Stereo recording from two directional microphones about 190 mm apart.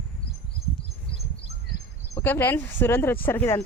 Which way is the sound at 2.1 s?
10° left (ahead or behind).